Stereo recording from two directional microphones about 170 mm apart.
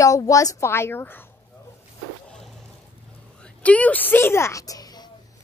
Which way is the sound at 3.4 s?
10° left (ahead or behind).